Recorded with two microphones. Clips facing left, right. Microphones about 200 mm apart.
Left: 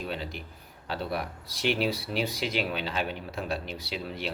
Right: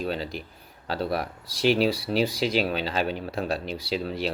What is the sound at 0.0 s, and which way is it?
Speech, 35° right (ahead or behind).